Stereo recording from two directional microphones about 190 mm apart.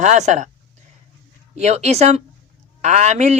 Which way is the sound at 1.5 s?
35° right (ahead or behind).